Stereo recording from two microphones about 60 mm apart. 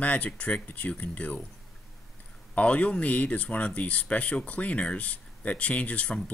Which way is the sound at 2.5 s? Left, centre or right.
Left.